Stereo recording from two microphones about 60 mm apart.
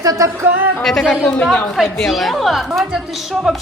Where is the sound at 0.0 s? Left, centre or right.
Right.